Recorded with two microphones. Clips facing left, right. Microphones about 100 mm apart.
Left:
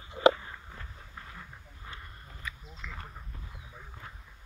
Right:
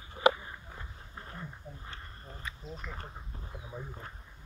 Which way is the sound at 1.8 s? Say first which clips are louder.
Even; 35° right (ahead or behind).